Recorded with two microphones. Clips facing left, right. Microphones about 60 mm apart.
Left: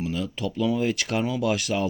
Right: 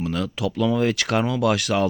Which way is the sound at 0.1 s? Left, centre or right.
Right.